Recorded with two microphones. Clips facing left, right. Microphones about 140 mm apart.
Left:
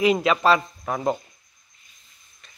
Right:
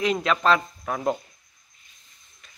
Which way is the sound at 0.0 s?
5° left (ahead or behind).